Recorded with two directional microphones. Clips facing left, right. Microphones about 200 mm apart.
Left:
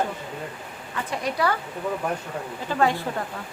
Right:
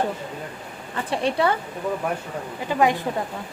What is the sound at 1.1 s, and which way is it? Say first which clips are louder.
Speech: right 4 dB; 30° right (ahead or behind).